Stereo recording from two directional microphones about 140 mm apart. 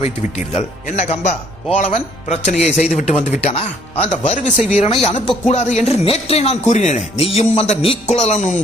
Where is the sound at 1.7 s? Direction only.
55° left (ahead or behind).